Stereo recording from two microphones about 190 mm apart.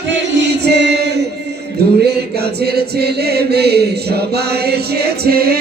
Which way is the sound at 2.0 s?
55° right (ahead or behind).